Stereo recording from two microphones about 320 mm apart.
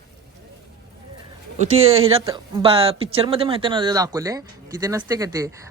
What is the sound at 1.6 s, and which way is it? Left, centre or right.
Speech, centre.